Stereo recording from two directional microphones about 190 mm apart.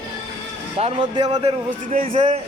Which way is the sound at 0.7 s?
25° right (ahead or behind).